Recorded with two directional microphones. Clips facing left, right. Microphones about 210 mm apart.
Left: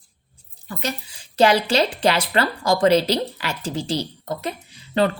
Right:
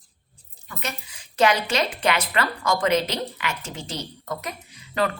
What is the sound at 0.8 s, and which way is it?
A woman's voice, 30° left (ahead or behind).